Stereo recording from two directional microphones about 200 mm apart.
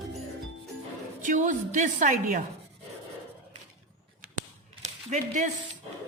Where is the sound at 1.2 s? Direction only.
40° right (ahead or behind).